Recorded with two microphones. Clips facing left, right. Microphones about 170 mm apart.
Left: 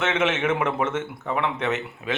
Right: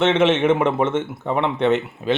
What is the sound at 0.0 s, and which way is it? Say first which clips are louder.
A man's voice: right 7 dB; 30° right (ahead or behind).